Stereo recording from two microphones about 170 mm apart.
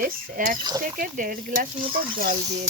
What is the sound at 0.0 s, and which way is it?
A woman's voice, 55° right (ahead or behind).